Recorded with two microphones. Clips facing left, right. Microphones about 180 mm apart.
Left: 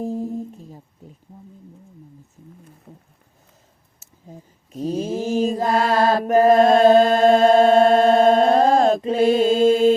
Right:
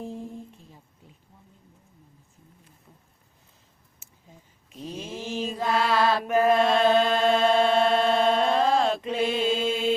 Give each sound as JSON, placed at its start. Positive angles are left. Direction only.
{"t": 0.0, "sound": "humming", "side_deg": 40}
{"t": 2.9, "sound": "wild animals", "side_deg": 50}
{"t": 4.0, "sound": "mantra", "side_deg": 40}